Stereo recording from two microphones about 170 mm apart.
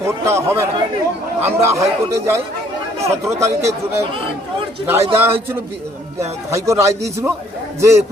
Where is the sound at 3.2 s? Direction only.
15° right (ahead or behind).